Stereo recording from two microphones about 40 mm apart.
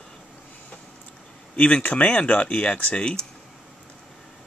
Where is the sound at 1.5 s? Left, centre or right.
Left.